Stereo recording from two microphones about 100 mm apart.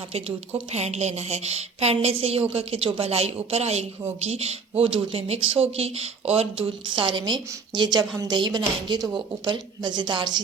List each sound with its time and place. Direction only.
0.1 s a woman's voice: 90° right
4.8 s speech: 65° right (ahead or behind); by 6.7 s 90° right
6.9 s a woman's voice: 55° right (ahead or behind)